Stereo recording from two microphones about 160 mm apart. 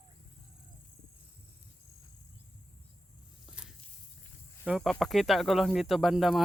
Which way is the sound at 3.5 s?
5° right (ahead or behind).